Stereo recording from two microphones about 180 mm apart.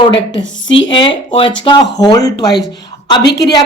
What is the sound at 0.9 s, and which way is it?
A woman's voice, 25° left (ahead or behind).